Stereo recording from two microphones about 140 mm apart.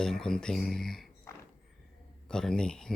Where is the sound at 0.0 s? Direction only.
5° left (ahead or behind).